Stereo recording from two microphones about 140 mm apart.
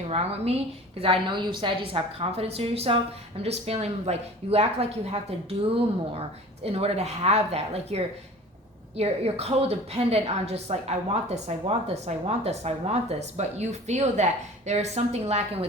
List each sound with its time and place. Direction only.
0.1 s a woman's voice: 45° right (ahead or behind)